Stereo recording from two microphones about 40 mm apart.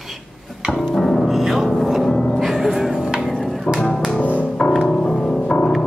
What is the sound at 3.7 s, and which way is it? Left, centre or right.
Music, centre.